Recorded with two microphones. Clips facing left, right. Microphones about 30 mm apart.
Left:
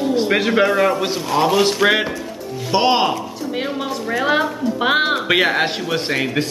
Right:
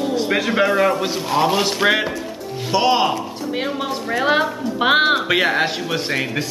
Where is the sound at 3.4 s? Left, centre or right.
Centre.